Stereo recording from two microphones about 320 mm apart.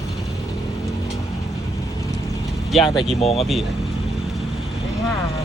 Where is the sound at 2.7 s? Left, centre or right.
Centre.